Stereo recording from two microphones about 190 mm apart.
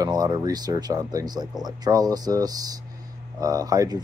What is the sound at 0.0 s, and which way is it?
Speech, 20° right (ahead or behind).